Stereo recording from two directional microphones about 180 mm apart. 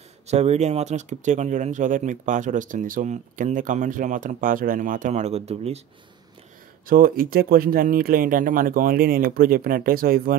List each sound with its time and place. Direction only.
0.3 s speech: 40° right (ahead or behind)
6.9 s speech: 50° right (ahead or behind)